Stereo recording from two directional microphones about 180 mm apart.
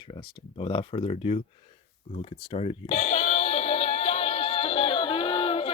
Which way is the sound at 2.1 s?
30° left (ahead or behind).